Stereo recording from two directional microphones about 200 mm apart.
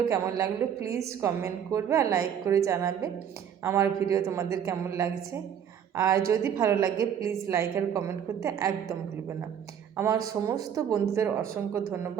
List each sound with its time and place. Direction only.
0.1 s a woman's voice: 15° right (ahead or behind)
10.0 s a woman's voice: 15° right (ahead or behind)